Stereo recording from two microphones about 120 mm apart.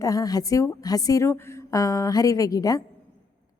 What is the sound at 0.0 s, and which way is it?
A woman's voice, 30° left (ahead or behind).